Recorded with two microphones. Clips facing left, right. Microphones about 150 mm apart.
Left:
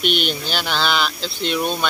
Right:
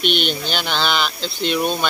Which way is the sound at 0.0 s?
5° left (ahead or behind).